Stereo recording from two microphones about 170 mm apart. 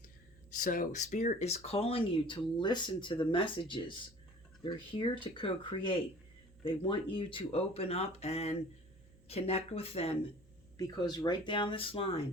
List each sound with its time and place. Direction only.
0.5 s speech: 50° left (ahead or behind); by 10.2 s 35° left (ahead or behind)
10.8 s speech: 20° left (ahead or behind)